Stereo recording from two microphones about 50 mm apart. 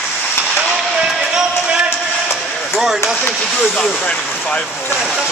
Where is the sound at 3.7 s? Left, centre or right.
Left.